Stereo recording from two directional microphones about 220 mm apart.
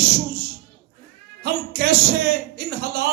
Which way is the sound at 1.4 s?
45° right (ahead or behind).